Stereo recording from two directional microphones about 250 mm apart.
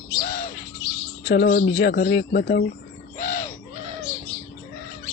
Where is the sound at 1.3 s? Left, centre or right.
Left.